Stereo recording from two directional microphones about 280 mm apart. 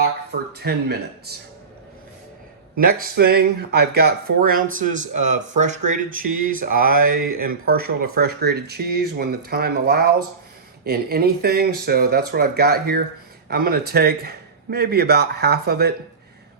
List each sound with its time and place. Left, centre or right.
0.0 s speech: right
2.7 s speech: right